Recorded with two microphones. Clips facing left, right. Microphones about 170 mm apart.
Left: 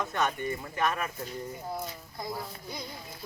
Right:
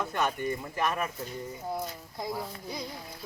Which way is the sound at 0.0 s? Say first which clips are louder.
Even; 10° right (ahead or behind).